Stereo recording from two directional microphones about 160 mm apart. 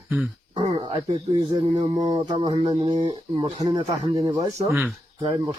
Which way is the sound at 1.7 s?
25° right (ahead or behind).